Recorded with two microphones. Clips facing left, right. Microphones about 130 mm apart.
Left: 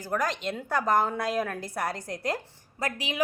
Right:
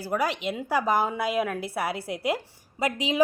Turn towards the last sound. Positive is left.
turn(degrees=-25)  # may be behind; listen again after turning